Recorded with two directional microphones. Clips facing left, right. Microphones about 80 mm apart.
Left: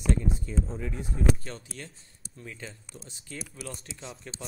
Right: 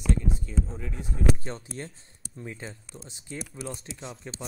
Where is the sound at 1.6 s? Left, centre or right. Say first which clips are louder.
Right 5 dB; right.